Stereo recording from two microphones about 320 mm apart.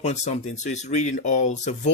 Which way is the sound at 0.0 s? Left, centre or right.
Left.